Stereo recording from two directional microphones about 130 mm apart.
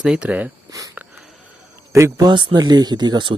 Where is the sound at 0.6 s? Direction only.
25° right (ahead or behind).